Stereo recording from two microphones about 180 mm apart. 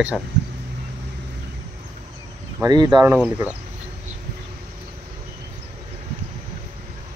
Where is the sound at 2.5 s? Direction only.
20° right (ahead or behind).